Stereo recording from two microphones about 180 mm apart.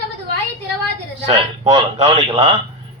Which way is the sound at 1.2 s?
35° right (ahead or behind).